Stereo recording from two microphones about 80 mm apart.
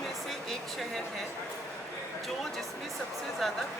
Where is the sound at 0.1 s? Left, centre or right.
Centre.